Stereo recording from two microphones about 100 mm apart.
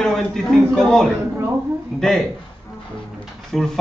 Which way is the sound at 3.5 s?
5° left (ahead or behind).